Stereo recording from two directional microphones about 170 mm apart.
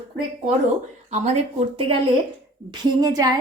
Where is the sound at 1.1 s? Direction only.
40° right (ahead or behind).